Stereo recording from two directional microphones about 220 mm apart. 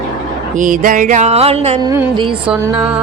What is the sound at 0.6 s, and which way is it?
Mantra, 35° right (ahead or behind).